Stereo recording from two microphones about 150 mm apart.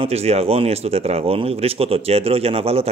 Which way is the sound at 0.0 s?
45° right (ahead or behind).